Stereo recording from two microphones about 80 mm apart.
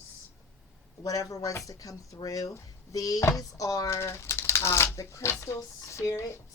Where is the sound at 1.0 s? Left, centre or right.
Left.